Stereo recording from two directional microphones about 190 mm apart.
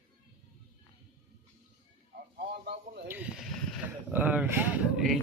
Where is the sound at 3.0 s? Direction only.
10° right (ahead or behind).